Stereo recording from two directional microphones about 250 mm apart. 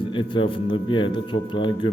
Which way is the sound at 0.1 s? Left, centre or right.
Centre.